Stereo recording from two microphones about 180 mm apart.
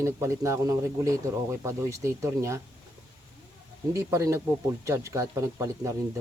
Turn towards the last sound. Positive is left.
turn(degrees=-15)  # may be behind; listen again after turning